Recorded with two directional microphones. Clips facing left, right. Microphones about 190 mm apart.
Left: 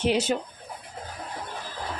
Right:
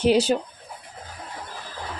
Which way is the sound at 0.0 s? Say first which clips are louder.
Right 5 dB; 35° right (ahead or behind).